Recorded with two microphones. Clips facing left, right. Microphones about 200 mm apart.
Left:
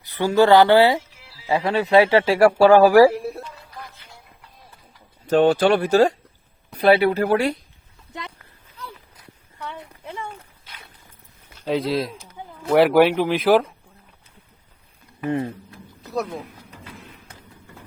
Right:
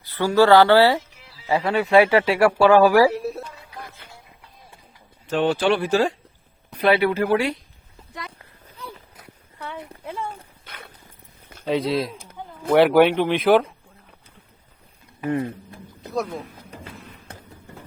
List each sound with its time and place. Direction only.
0.0 s speech: 15° left (ahead or behind)
1.6 s speech: 25° left (ahead or behind); by 3.0 s 45° left (ahead or behind)
3.3 s music: centre (ahead or behind)
5.3 s speech: 40° left (ahead or behind)
8.8 s a sound: 25° right (ahead or behind)
10.0 s a sound: 5° right (ahead or behind)
10.7 s horse: 60° right (ahead or behind)
11.6 s speech: centre (ahead or behind)
12.1 s a sound: 50° right (ahead or behind)
12.7 s speech: centre (ahead or behind)
16.0 s speech: centre (ahead or behind)